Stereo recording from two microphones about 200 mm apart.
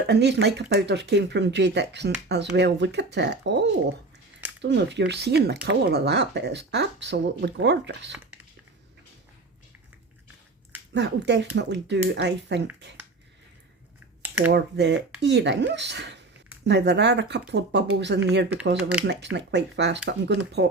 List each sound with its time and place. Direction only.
0.1 s speech: 55° right (ahead or behind)
10.9 s speech: 60° right (ahead or behind)
14.2 s a sound: 10° right (ahead or behind)
14.5 s speech: 60° right (ahead or behind)
18.8 s speech: 5° right (ahead or behind)
19.0 s speech: 60° right (ahead or behind)